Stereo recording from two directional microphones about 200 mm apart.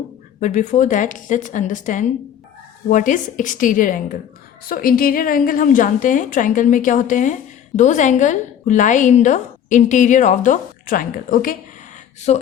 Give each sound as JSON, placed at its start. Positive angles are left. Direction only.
{"t": 0.3, "sound": "a woman's voice", "side_deg": 40}
{"t": 12.3, "sound": "a woman's voice", "side_deg": 35}